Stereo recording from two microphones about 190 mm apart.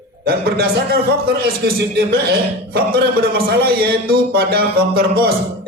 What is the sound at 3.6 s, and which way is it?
Speech, 55° right (ahead or behind).